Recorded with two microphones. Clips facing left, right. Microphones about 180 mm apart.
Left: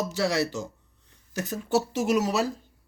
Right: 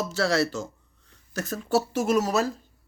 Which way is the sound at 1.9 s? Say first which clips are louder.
Right 1 dB; 50° right (ahead or behind).